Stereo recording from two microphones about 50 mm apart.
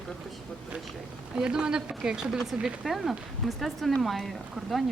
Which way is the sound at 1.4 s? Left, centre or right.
Centre.